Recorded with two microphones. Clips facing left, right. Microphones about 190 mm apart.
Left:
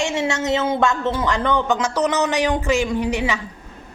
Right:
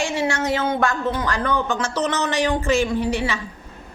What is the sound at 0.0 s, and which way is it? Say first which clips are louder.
A woman's voice: left 1 dB; 25° left (ahead or behind).